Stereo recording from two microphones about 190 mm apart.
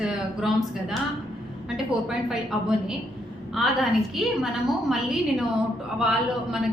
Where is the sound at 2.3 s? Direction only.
5° right (ahead or behind).